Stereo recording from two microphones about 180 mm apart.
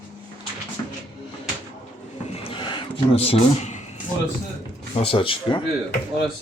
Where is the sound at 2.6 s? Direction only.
25° left (ahead or behind).